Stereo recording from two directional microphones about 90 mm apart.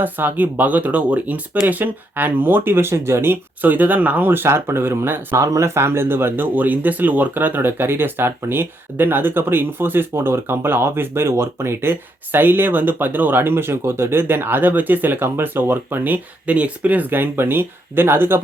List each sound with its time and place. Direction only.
0.0 s speech: 20° right (ahead or behind)
5.4 s speech: 35° right (ahead or behind)